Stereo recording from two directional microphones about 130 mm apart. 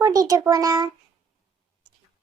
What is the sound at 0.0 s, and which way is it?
Speech, 30° right (ahead or behind).